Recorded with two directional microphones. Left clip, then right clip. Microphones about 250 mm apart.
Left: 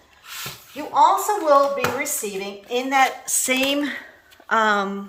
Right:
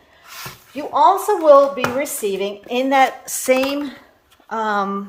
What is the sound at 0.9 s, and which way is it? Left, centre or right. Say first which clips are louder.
Speech: right 2 dB; right.